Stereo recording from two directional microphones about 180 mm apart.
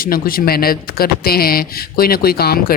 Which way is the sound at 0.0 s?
55° left (ahead or behind).